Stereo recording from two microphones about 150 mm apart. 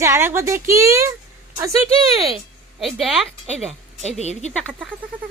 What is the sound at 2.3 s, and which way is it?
Speech, centre (ahead or behind).